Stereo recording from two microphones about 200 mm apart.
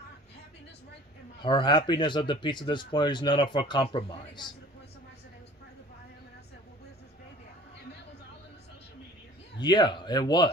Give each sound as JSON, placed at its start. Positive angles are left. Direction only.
{"t": 1.4, "sound": "speech", "side_deg": 25}
{"t": 9.6, "sound": "speech", "side_deg": 20}